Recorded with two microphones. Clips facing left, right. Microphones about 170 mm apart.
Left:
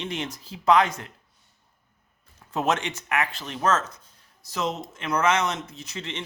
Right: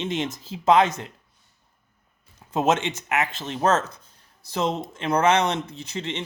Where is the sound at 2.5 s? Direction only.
20° right (ahead or behind).